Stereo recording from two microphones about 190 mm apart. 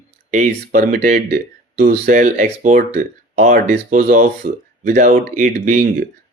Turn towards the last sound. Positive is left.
turn(degrees=-40)  # may be behind; listen again after turning